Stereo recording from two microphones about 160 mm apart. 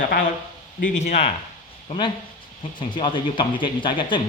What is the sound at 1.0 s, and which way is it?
Speech, 40° left (ahead or behind).